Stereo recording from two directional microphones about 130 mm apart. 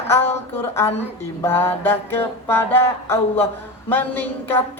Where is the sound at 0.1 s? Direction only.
15° left (ahead or behind).